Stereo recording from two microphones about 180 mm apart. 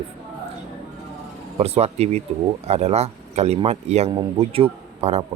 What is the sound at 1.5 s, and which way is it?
A man's voice, 35° right (ahead or behind).